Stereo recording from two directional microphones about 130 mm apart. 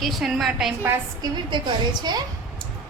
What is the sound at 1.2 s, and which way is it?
A woman's voice, 35° right (ahead or behind).